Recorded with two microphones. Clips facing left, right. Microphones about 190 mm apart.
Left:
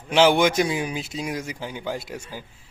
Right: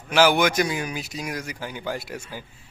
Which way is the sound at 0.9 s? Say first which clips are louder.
Left 2 dB; 25° left (ahead or behind).